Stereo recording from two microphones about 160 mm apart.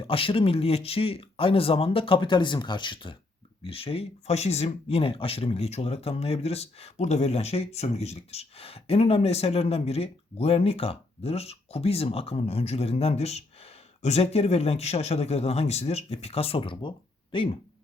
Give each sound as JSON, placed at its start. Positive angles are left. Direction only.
{"t": 0.0, "sound": "speech", "side_deg": 35}